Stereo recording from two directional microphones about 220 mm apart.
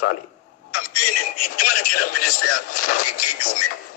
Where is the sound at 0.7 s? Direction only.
40° left (ahead or behind).